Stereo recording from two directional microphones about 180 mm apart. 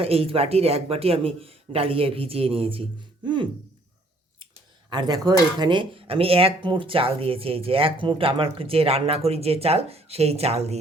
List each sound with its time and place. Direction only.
0.0 s speech: 35° right (ahead or behind)
4.9 s speech: 25° right (ahead or behind)